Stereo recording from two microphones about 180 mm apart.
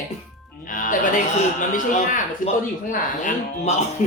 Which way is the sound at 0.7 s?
45° left (ahead or behind).